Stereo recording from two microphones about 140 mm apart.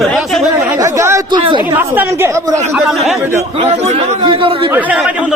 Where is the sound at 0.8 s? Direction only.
20° right (ahead or behind).